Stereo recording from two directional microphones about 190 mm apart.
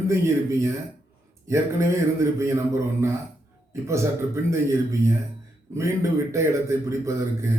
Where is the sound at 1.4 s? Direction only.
15° right (ahead or behind).